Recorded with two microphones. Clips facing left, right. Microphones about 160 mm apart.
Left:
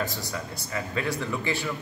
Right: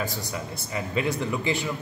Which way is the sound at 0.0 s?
20° right (ahead or behind).